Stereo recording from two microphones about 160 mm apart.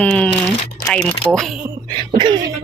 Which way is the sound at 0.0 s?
5° left (ahead or behind).